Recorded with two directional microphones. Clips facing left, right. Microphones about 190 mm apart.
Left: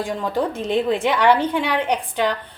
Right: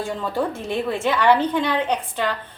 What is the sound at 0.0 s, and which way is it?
A woman's voice, 15° left (ahead or behind).